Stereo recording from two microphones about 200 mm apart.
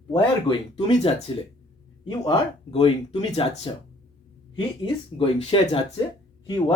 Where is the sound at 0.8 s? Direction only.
25° left (ahead or behind).